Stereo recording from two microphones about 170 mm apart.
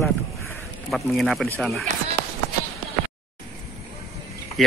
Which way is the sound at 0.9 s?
Centre (ahead or behind).